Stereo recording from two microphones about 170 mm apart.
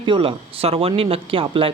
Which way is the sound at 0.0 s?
30° right (ahead or behind).